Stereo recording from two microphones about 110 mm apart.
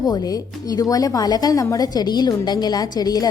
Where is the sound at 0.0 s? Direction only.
35° left (ahead or behind).